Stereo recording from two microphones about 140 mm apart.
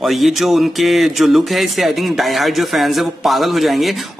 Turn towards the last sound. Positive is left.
turn(degrees=0)  # may be behind; listen again after turning